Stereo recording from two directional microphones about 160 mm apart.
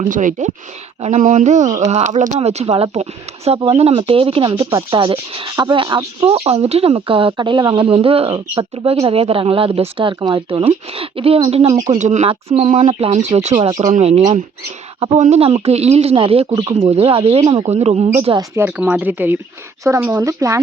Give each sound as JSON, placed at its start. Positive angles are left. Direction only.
{"t": 0.1, "sound": "speech", "side_deg": -55}
{"t": 11.7, "sound": "speech", "side_deg": -20}
{"t": 11.9, "sound": "speech", "side_deg": -50}
{"t": 13.6, "sound": "speech", "side_deg": -25}
{"t": 13.8, "sound": "speech", "side_deg": -40}
{"t": 18.5, "sound": "speech", "side_deg": -15}